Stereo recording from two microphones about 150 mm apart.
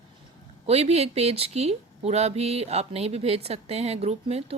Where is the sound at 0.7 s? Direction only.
45° right (ahead or behind).